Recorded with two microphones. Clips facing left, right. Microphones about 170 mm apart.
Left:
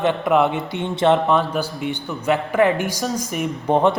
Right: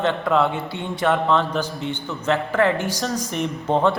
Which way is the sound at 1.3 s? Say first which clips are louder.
Left 1 dB; 10° left (ahead or behind).